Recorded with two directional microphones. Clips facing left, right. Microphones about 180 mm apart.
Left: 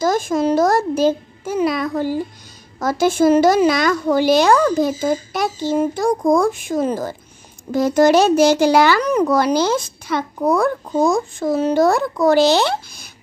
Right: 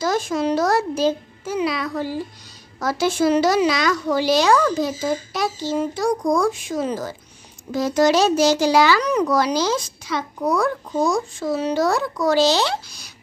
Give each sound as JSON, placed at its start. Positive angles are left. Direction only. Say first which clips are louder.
{"t": 0.0, "sound": "a woman's voice", "louder": "left 4 dB", "side_deg": 50}